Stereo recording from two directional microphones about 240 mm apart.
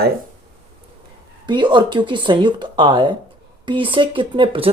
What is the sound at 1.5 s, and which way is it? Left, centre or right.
Speech, centre.